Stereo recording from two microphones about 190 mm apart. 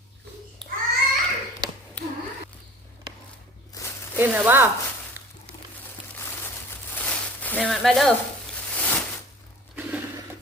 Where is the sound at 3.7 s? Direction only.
15° left (ahead or behind).